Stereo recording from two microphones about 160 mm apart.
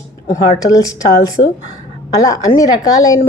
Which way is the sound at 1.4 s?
40° left (ahead or behind).